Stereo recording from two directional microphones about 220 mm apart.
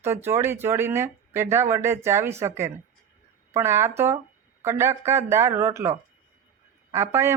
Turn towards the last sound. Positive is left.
turn(degrees=-10)  # may be behind; listen again after turning